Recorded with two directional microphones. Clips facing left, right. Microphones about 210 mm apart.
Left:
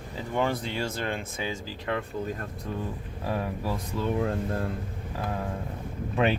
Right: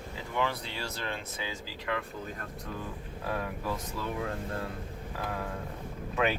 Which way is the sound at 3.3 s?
30° left (ahead or behind).